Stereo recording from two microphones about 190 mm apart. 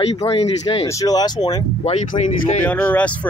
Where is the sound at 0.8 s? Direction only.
20° left (ahead or behind).